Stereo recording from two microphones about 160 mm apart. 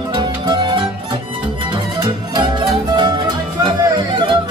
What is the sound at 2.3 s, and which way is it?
Music, 25° right (ahead or behind).